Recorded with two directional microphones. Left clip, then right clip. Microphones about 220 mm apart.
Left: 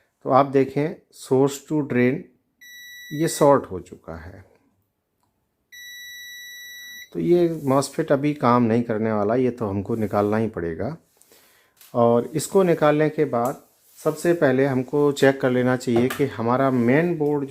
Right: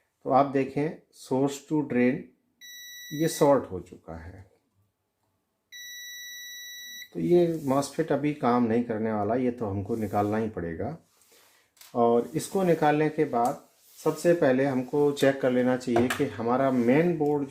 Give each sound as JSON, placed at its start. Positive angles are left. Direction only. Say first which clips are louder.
{"t": 0.2, "sound": "speech", "louder": "left 5 dB", "side_deg": 45}
{"t": 7.1, "sound": "speech", "louder": "left 4 dB", "side_deg": 45}